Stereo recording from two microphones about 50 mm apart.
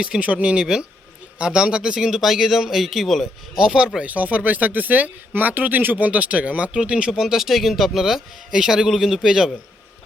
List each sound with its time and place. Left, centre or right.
0.2 s speech: right; by 3.2 s centre
3.5 s speech: centre
4.0 s speech: right
7.1 s speech: centre